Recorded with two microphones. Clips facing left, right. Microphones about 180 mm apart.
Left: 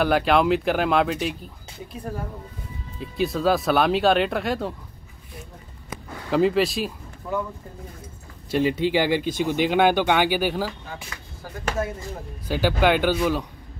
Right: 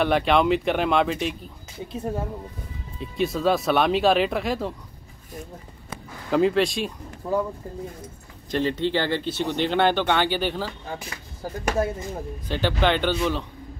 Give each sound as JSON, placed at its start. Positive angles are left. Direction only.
{"t": 0.0, "sound": "speech", "side_deg": 0}
{"t": 1.9, "sound": "speech", "side_deg": -25}
{"t": 3.0, "sound": "speech", "side_deg": 0}
{"t": 6.3, "sound": "speech", "side_deg": 0}
{"t": 7.2, "sound": "speech", "side_deg": -30}
{"t": 8.5, "sound": "speech", "side_deg": 10}
{"t": 12.4, "sound": "speech", "side_deg": 10}